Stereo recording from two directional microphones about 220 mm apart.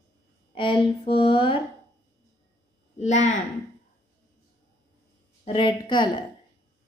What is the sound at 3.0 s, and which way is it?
Speech, 30° left (ahead or behind).